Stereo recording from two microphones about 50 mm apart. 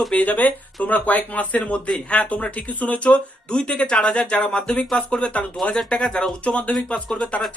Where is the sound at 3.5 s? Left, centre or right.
Left.